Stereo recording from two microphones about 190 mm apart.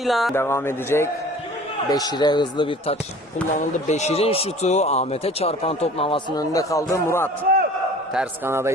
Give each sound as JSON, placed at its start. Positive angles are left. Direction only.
{"t": 0.0, "sound": "speech", "side_deg": 0}
{"t": 0.3, "sound": "a man's voice", "side_deg": 15}
{"t": 8.1, "sound": "speech", "side_deg": -10}